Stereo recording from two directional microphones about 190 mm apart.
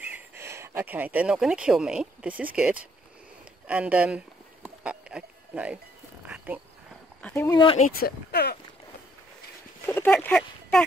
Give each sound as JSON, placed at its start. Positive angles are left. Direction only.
{"t": 0.4, "sound": "speech", "side_deg": -15}
{"t": 4.6, "sound": "music", "side_deg": -5}
{"t": 6.2, "sound": "cricket", "side_deg": -5}
{"t": 7.2, "sound": "speech", "side_deg": 5}
{"t": 7.4, "sound": "speech", "side_deg": 25}
{"t": 8.0, "sound": "speech", "side_deg": 55}
{"t": 9.8, "sound": "speech", "side_deg": 10}